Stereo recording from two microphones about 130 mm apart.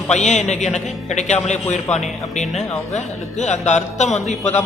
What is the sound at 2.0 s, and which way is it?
A man's voice, 65° left (ahead or behind).